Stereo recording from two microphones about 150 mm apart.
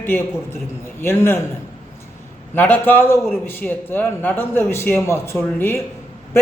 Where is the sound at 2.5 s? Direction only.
10° left (ahead or behind).